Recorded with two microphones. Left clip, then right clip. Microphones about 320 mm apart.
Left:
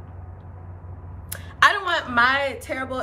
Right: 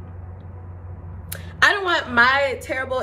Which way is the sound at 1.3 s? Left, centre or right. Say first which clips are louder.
Even; centre.